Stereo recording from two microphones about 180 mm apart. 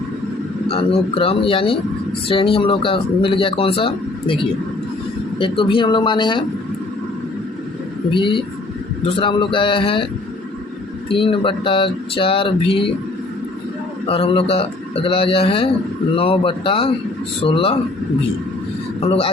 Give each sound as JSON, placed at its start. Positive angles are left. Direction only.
{"t": 0.7, "sound": "speech", "side_deg": 30}
{"t": 5.4, "sound": "speech", "side_deg": 30}
{"t": 8.1, "sound": "speech", "side_deg": 25}
{"t": 11.1, "sound": "speech", "side_deg": 30}
{"t": 14.1, "sound": "speech", "side_deg": 30}
{"t": 18.9, "sound": "speech", "side_deg": 30}